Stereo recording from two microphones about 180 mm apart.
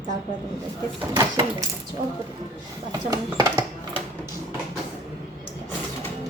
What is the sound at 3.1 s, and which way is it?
Speech, 20° right (ahead or behind).